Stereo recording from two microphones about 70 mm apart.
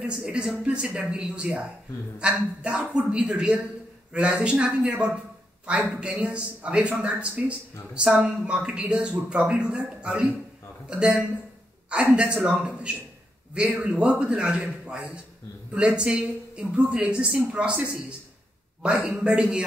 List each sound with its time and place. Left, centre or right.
0.2 s a man's voice: centre
12.2 s a man's voice: centre